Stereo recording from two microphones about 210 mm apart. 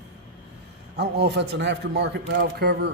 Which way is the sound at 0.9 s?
50° right (ahead or behind).